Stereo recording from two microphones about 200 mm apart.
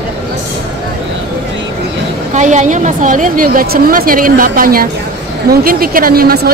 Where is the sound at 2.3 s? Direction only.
35° right (ahead or behind).